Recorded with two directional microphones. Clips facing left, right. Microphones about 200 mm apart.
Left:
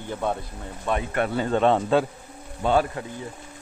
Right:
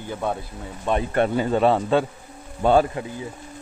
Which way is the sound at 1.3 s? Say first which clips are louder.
Left 1 dB; 10° right (ahead or behind).